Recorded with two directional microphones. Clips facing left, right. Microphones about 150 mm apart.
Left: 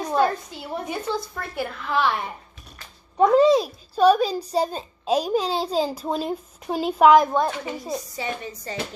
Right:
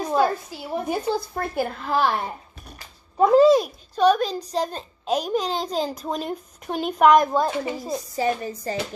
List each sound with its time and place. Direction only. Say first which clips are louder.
0.0 s a woman's voice: even; 5° right (ahead or behind)
0.8 s a woman's voice: right 4 dB; 45° right (ahead or behind)
3.2 s a child's voice: right 1 dB; centre (ahead or behind)
8.2 s speech: right 6 dB; 40° right (ahead or behind)